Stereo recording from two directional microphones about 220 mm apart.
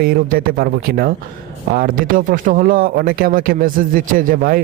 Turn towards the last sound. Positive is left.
turn(degrees=-40)  # may be behind; listen again after turning